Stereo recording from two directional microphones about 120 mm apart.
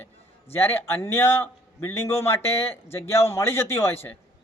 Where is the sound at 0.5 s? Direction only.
20° left (ahead or behind).